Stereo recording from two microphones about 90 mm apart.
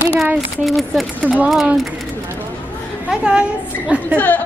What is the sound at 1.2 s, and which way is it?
Speech, 15° right (ahead or behind).